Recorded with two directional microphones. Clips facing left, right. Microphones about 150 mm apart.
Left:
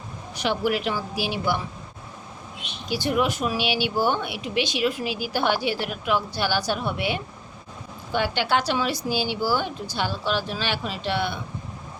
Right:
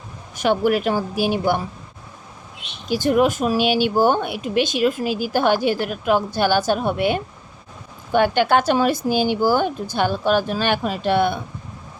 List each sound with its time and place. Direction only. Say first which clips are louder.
0.3 s speech: right 6 dB; 50° right (ahead or behind)
2.9 s speech: right 6 dB; 45° right (ahead or behind)